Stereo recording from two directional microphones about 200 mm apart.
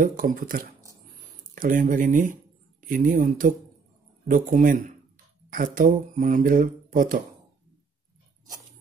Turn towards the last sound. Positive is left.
turn(degrees=-45)  # may be behind; listen again after turning